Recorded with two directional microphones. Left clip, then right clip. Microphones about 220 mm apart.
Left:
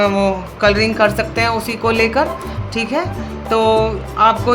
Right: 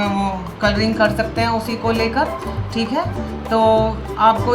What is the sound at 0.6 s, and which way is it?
Speech, 45° left (ahead or behind).